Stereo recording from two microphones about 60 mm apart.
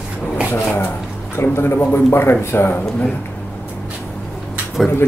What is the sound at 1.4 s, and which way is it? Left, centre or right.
Speech, left.